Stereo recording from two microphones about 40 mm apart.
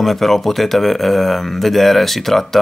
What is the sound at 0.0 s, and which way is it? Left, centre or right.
Speech, centre.